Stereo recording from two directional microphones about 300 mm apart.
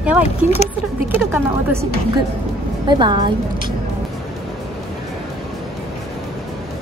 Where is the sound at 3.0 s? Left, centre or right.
Centre.